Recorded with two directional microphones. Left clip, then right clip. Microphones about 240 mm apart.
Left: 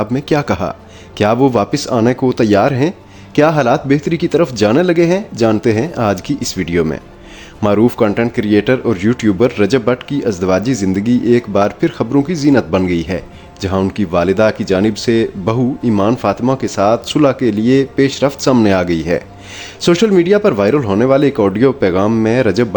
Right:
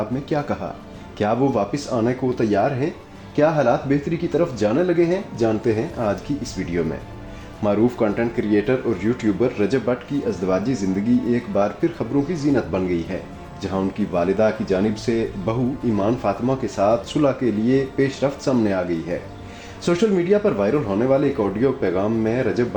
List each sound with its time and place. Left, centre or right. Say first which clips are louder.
0.1 s speech: left 8 dB; left